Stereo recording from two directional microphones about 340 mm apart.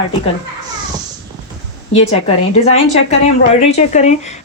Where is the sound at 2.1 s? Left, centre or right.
Centre.